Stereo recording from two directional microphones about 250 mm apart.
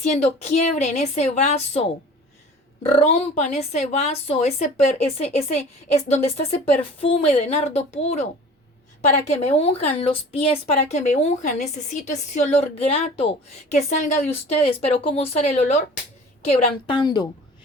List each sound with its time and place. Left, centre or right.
0.0 s a woman's voice: left
16.8 s speech: centre